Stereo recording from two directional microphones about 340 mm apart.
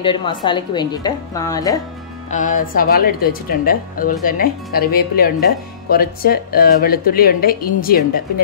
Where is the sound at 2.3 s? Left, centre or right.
Left.